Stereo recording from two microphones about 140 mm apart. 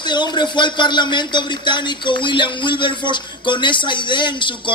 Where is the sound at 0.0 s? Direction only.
30° left (ahead or behind).